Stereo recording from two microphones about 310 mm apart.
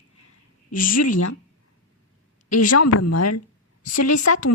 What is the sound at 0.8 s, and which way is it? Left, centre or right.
Speech, left.